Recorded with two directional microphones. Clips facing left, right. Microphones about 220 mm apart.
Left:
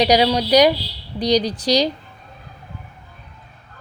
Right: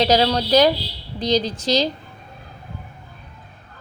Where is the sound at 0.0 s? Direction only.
15° left (ahead or behind).